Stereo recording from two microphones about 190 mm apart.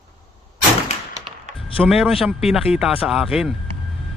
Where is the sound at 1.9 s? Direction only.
Centre (ahead or behind).